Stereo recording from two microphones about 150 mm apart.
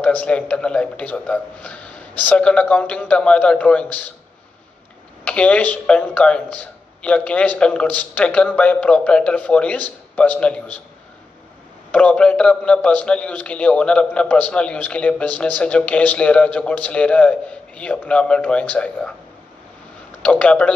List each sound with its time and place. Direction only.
0.0 s a man's voice: 10° left (ahead or behind)
5.2 s a man's voice: 10° left (ahead or behind)
11.9 s a man's voice: 10° left (ahead or behind)
20.2 s a man's voice: 10° left (ahead or behind)